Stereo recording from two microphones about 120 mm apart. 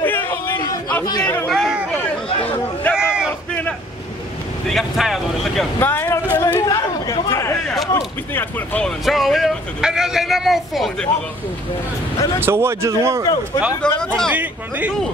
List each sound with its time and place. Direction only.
0.0 s a sound: 15° left (ahead or behind)
1.0 s a man's voice: 35° left (ahead or behind)
1.5 s a sound: centre (ahead or behind)
2.4 s chatter: 15° left (ahead or behind)
2.9 s crowd: 5° right (ahead or behind)
4.6 s speech: centre (ahead or behind)
5.8 s a sound: 20° left (ahead or behind)
6.6 s chatter: 30° left (ahead or behind)
7.6 s a sound: centre (ahead or behind)
7.9 s speech: 15° left (ahead or behind)
8.8 s a man's voice: centre (ahead or behind)
12.4 s speech: 20° right (ahead or behind)
13.8 s speech: 5° left (ahead or behind)
14.3 s speech: 15° right (ahead or behind)